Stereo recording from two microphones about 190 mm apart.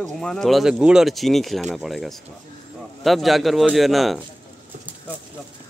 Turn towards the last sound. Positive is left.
turn(degrees=0)  # may be behind; listen again after turning